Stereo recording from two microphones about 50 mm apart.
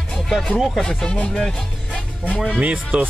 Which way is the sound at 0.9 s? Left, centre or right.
Centre.